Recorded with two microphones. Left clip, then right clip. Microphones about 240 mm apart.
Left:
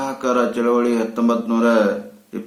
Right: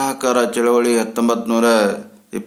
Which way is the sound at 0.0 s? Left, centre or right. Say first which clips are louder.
Right 2 dB; right.